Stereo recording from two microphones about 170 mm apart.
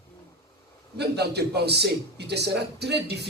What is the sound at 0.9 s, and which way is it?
A man's voice, 75° right (ahead or behind).